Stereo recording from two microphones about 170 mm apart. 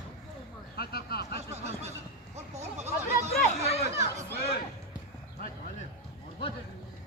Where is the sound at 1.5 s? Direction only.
40° right (ahead or behind).